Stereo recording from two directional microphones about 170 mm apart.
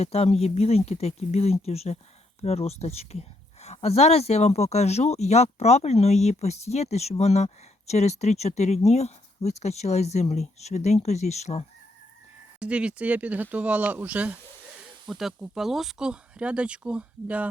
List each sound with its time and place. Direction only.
0.0 s speech: 35° left (ahead or behind)
12.5 s speech: 5° right (ahead or behind)